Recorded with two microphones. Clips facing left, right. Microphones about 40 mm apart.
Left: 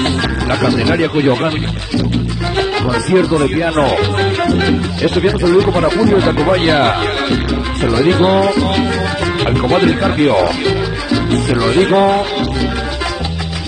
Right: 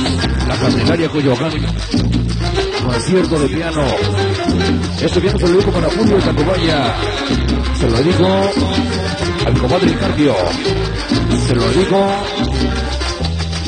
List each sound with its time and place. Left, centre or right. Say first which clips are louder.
0.0 s music: left 2 dB; left
0.7 s speech: right 1 dB; centre
2.5 s speech: left 2 dB; left
4.2 s salsa music: left 2 dB; left
5.0 s speech: left 1 dB; centre
5.8 s speech: left 2 dB; left
6.1 s speech: left 2 dB; centre
7.8 s speech: left 2 dB; left
10.0 s music: left 2 dB; centre
11.7 s speech: left 3 dB; left
12.1 s speech: left 3 dB; centre